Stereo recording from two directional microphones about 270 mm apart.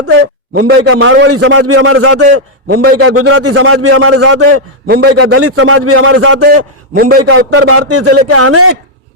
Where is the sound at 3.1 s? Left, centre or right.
Right.